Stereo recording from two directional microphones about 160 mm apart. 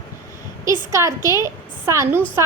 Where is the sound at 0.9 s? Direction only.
20° right (ahead or behind).